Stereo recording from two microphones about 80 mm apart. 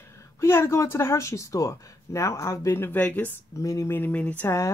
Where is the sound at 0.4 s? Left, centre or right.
Left.